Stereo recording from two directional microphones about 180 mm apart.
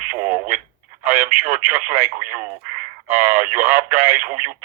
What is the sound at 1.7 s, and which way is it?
Speech, 10° right (ahead or behind).